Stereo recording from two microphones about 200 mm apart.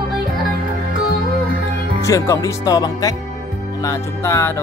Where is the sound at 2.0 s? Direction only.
15° left (ahead or behind).